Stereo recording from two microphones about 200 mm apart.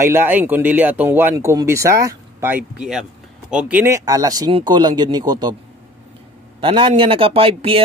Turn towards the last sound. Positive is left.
turn(degrees=-30)  # may be behind; listen again after turning